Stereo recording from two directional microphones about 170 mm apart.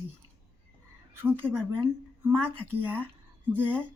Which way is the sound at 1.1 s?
15° right (ahead or behind).